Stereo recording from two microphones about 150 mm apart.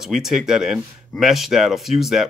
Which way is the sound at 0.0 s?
Centre (ahead or behind).